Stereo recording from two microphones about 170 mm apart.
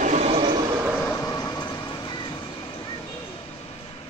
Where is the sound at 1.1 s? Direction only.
20° left (ahead or behind).